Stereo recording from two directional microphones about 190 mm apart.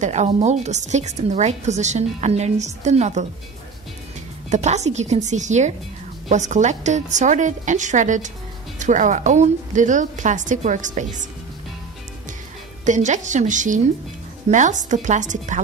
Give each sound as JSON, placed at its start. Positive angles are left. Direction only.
{"t": 0.0, "sound": "a woman's voice", "side_deg": -35}
{"t": 4.5, "sound": "a woman's voice", "side_deg": -35}
{"t": 12.8, "sound": "a woman's voice", "side_deg": -40}